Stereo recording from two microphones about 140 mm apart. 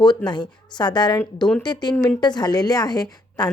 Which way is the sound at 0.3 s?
30° left (ahead or behind).